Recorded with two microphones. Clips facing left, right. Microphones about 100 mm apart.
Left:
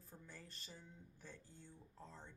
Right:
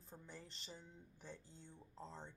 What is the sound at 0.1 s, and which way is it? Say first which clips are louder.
Speech: right 2 dB; 20° right (ahead or behind).